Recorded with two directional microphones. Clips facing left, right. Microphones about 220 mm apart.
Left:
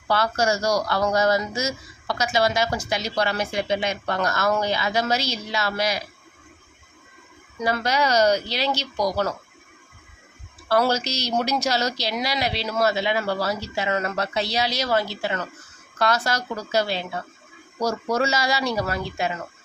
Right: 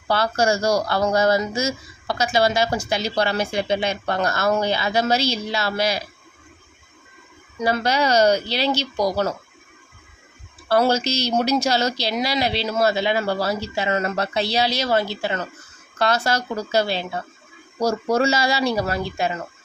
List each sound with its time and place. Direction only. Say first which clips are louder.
0.1 s speech: right 2 dB; 30° right (ahead or behind)
7.6 s speech: right 2 dB; 30° right (ahead or behind)
10.7 s speech: right 3 dB; 25° right (ahead or behind)